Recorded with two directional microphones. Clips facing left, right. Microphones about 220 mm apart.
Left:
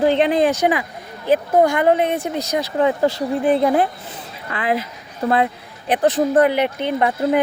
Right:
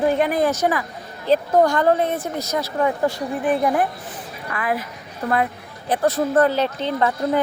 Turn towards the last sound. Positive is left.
turn(degrees=15)  # may be behind; listen again after turning